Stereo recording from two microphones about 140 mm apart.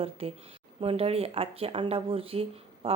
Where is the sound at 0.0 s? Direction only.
45° right (ahead or behind).